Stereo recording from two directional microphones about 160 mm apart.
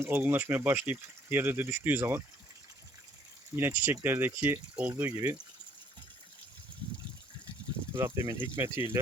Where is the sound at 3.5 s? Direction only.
15° right (ahead or behind).